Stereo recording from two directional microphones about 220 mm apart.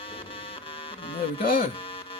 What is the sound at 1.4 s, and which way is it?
Speech, 40° left (ahead or behind).